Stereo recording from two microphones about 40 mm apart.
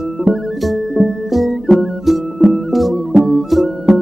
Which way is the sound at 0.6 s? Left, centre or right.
Centre.